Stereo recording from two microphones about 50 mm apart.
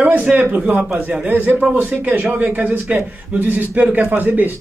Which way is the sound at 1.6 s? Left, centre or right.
Right.